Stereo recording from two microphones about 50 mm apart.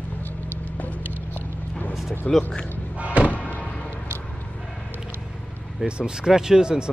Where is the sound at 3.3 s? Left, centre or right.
Left.